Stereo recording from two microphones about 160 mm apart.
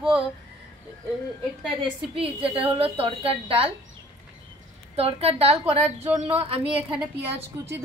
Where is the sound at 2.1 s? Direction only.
35° right (ahead or behind).